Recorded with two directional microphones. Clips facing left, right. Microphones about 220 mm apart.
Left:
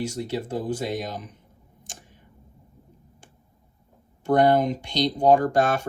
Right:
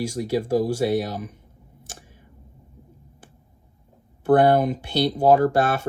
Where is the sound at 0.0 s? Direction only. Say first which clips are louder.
Right 4 dB; 10° right (ahead or behind).